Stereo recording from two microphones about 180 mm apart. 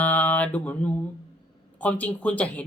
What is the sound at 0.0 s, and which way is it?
Mantra, 10° left (ahead or behind).